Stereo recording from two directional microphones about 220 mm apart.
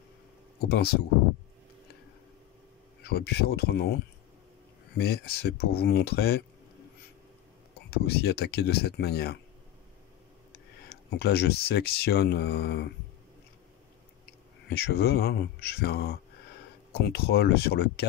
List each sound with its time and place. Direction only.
0.7 s speech: 45° left (ahead or behind)
3.0 s speech: 45° left (ahead or behind)
4.9 s speech: 45° left (ahead or behind)
7.9 s speech: 45° left (ahead or behind)
10.9 s speech: 45° left (ahead or behind)
14.7 s speech: 45° left (ahead or behind)